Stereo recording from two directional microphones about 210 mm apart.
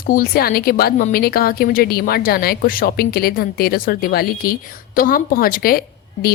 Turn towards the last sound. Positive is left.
turn(degrees=45)  # may be behind; listen again after turning